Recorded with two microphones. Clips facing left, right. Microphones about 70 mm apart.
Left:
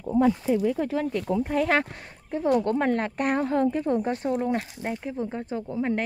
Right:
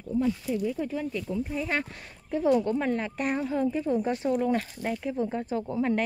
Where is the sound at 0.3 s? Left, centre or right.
Left.